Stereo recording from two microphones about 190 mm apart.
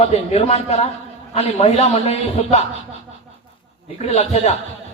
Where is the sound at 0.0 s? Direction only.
35° left (ahead or behind).